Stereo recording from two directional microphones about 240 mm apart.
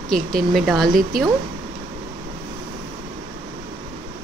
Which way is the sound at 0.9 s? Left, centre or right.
Right.